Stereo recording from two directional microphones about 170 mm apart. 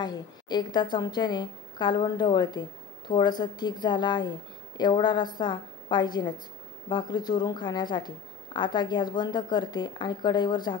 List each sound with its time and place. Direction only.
0.0 s a woman's voice: 25° left (ahead or behind)